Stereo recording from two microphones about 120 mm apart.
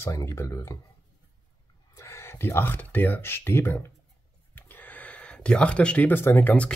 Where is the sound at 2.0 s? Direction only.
25° left (ahead or behind).